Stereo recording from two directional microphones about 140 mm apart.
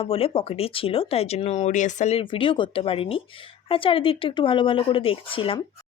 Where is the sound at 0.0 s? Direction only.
40° left (ahead or behind); by 2.1 s 60° left (ahead or behind).